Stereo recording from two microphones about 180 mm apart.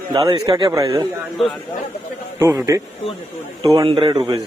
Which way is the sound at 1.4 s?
Centre (ahead or behind).